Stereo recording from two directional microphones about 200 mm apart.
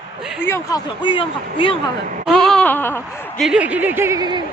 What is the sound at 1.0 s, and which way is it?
Speech, 25° left (ahead or behind).